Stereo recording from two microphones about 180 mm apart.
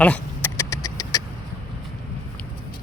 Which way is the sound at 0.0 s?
10° left (ahead or behind).